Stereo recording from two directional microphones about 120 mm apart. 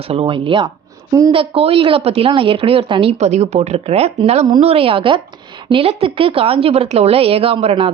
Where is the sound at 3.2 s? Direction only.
65° right (ahead or behind); by 7.9 s 45° right (ahead or behind).